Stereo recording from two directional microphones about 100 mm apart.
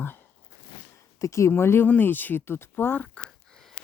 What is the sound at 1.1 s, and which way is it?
Speech, 30° left (ahead or behind).